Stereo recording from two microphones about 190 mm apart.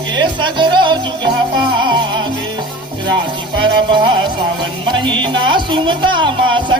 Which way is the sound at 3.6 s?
25° right (ahead or behind).